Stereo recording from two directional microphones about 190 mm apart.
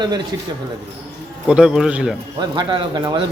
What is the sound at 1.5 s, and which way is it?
Speech, 5° right (ahead or behind).